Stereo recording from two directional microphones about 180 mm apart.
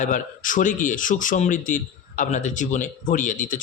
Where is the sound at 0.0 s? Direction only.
45° left (ahead or behind).